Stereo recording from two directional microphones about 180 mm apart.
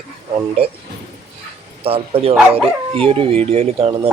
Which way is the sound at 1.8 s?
35° right (ahead or behind).